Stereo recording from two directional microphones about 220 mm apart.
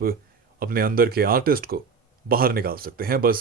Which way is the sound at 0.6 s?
40° right (ahead or behind).